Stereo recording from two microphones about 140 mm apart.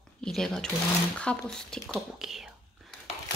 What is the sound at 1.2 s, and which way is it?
Speech, 5° left (ahead or behind).